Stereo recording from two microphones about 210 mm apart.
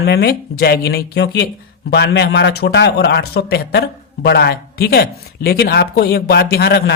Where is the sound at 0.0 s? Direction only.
50° left (ahead or behind).